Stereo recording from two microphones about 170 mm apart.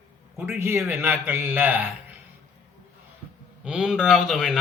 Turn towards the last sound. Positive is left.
turn(degrees=0)  # may be behind; listen again after turning